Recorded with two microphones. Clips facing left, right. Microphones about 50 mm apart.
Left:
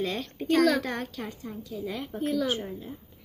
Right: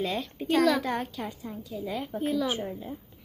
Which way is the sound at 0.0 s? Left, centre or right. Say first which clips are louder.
Even; centre.